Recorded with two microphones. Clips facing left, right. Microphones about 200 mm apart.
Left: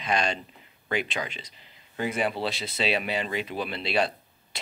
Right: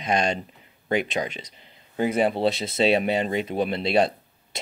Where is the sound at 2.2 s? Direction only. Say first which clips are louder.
Right 7 dB; 25° right (ahead or behind).